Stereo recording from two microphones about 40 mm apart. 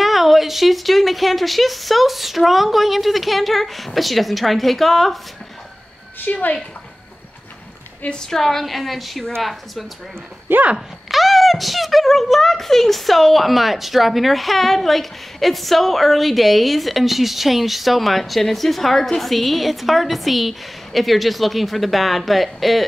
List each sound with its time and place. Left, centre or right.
0.0 s speech: centre
6.1 s speech: left
8.1 s speech: centre
10.5 s speech: right
11.1 s speech: centre